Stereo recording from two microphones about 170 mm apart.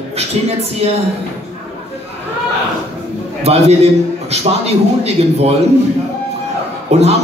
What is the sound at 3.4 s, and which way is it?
A man's voice, 40° right (ahead or behind).